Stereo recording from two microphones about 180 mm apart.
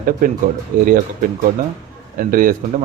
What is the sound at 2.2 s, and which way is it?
Speech, 50° right (ahead or behind).